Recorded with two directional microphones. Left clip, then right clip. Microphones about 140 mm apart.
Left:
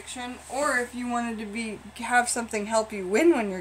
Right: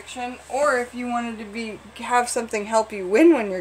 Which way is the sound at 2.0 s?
20° right (ahead or behind).